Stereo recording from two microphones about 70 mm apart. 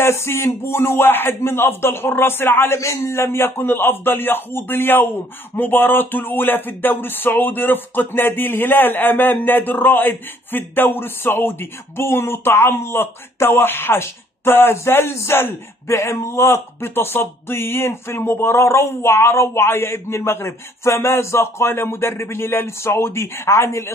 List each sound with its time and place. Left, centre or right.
0.0 s a man's voice: left